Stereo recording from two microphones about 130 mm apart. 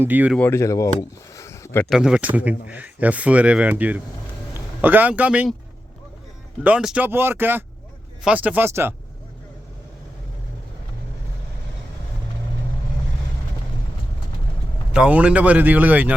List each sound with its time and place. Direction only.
0.0 s speech: 15° right (ahead or behind)
0.3 s speech: 15° left (ahead or behind)
1.4 s a sound: 20° left (ahead or behind)
1.9 s speech: 5° right (ahead or behind)
6.6 s speech: 10° right (ahead or behind)
14.9 s speech: 10° right (ahead or behind)